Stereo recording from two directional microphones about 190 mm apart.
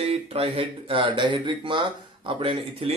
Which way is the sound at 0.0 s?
30° right (ahead or behind).